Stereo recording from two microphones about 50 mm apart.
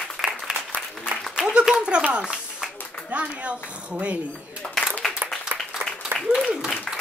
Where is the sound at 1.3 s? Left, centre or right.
Centre.